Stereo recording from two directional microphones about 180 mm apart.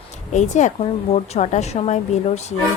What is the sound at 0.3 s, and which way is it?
A woman's voice, 40° left (ahead or behind).